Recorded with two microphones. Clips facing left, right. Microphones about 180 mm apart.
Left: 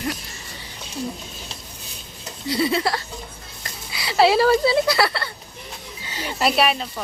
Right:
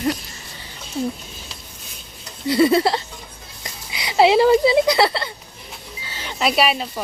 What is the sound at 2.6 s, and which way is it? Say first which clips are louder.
Speech: right 7 dB; 50° right (ahead or behind).